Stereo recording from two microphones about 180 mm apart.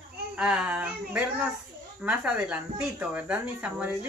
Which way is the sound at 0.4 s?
5° right (ahead or behind).